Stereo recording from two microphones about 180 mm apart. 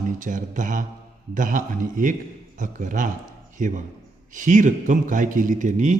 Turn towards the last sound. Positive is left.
turn(degrees=-45)  # may be behind; listen again after turning